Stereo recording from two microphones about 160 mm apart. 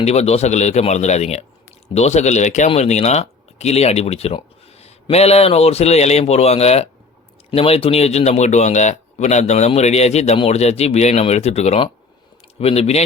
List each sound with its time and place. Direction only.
0.0 s speech: 40° left (ahead or behind)